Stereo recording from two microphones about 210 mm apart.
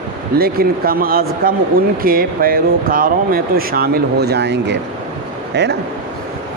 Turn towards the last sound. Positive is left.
turn(degrees=-55)  # may be behind; listen again after turning